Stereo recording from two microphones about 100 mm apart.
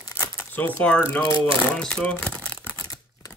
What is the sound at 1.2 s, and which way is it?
Speech, 55° right (ahead or behind).